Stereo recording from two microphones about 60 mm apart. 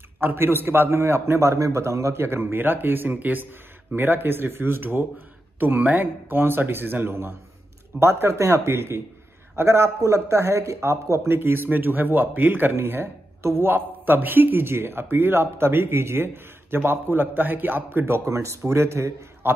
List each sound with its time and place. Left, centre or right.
0.2 s a man's voice: right
2.2 s a man's voice: right